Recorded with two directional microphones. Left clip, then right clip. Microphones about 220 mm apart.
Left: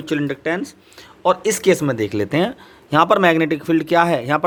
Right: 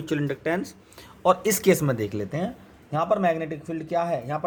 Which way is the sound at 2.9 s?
40° left (ahead or behind).